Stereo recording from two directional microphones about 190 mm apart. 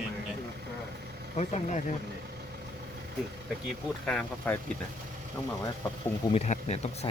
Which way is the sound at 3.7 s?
5° left (ahead or behind).